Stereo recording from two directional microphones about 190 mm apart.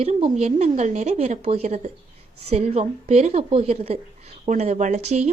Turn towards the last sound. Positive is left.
turn(degrees=-35)  # may be behind; listen again after turning